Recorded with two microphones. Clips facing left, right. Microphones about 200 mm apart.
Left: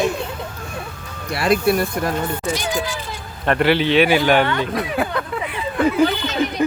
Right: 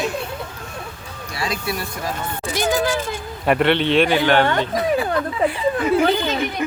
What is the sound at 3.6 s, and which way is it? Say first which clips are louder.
Speech: left 2 dB; 5° left (ahead or behind).